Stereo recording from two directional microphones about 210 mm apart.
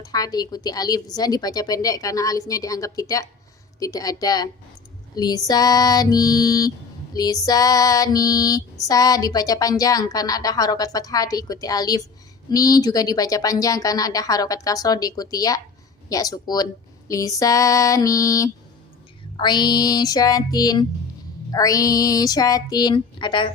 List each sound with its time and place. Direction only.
0.0 s female singing: 20° left (ahead or behind)
19.4 s music: 20° left (ahead or behind)
21.5 s female singing: 15° left (ahead or behind)